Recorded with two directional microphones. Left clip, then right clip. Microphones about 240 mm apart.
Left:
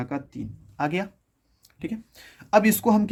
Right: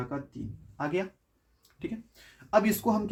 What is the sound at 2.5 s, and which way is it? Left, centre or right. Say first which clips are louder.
Speech: left 6 dB; left.